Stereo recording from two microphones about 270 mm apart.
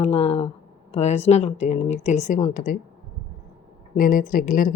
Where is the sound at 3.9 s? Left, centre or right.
Left.